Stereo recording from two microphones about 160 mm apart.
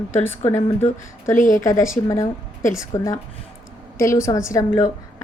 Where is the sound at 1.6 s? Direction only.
20° left (ahead or behind).